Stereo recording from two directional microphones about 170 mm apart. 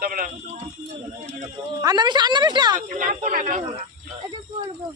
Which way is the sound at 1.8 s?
25° right (ahead or behind).